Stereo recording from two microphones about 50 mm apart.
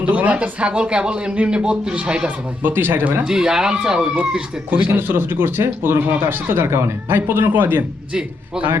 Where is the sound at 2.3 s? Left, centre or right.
Right.